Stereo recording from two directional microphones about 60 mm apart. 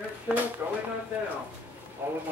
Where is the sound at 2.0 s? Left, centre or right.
Right.